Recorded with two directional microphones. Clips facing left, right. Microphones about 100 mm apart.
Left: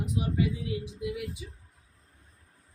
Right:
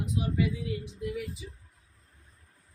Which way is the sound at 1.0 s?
10° left (ahead or behind).